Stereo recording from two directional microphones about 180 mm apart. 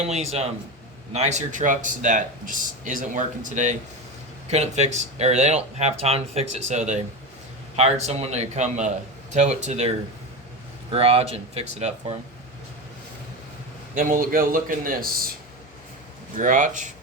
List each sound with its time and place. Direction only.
0.0 s speech: 35° right (ahead or behind)
10.9 s speech: 35° right (ahead or behind)
13.9 s speech: 50° right (ahead or behind)
16.4 s speech: 45° right (ahead or behind)